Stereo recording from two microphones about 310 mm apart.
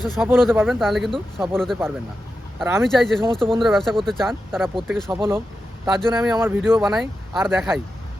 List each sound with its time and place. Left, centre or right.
0.2 s speech: centre